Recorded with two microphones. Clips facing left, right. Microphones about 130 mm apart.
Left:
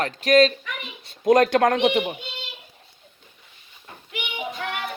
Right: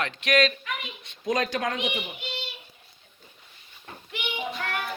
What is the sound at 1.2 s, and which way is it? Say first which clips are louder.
Speech: left 10 dB; 55° left (ahead or behind).